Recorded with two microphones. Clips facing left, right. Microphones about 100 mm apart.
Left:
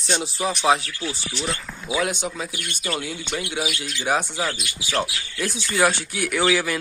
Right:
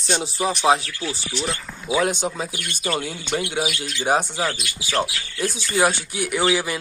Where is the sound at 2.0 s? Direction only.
35° right (ahead or behind).